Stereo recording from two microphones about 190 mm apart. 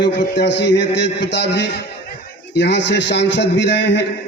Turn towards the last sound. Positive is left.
turn(degrees=65)  # may be behind; listen again after turning